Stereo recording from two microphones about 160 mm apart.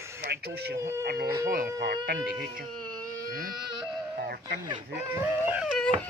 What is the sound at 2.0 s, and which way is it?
Speech, 80° right.